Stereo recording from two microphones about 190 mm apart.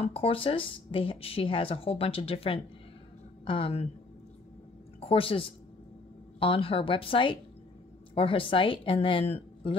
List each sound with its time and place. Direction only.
0.0 s speech: 30° left (ahead or behind)
5.0 s speech: 30° left (ahead or behind)